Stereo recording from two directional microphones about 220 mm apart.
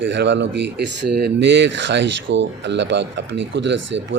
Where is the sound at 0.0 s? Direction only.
55° right (ahead or behind).